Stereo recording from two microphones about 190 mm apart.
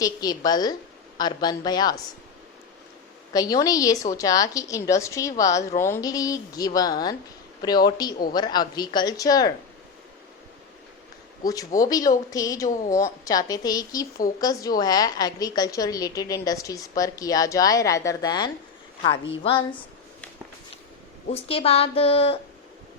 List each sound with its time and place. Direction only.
0.0 s a woman's voice: 20° left (ahead or behind)
3.3 s a woman's voice: 20° left (ahead or behind)
11.4 s speech: 45° left (ahead or behind)
11.8 s a woman's voice: 20° left (ahead or behind)
12.6 s speech: 40° left (ahead or behind)
12.9 s a woman's voice: 15° left (ahead or behind)
21.3 s speech: 30° left (ahead or behind)